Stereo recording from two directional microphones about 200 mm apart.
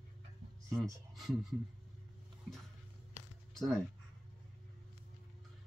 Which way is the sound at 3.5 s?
Centre (ahead or behind).